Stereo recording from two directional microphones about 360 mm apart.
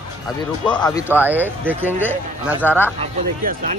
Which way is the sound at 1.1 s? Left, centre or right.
Centre.